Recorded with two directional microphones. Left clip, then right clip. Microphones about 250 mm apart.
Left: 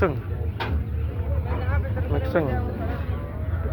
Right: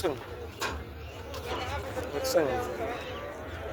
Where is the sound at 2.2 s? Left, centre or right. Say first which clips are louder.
Left 1 dB; centre.